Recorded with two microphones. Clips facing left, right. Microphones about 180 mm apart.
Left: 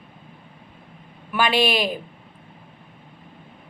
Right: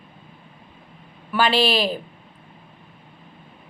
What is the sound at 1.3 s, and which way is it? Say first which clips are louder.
Speech: right 1 dB; 15° left (ahead or behind).